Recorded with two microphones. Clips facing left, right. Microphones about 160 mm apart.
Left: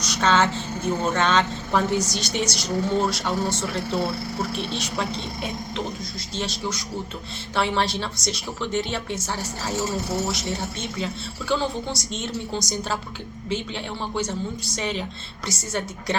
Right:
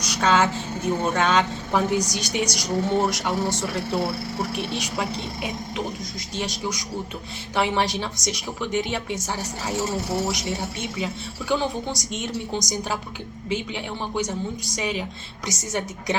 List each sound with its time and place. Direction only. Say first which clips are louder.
0.0 s speech: even; 10° right (ahead or behind)